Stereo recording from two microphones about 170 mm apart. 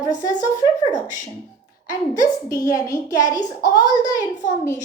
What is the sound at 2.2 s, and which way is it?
A woman's voice, 20° left (ahead or behind).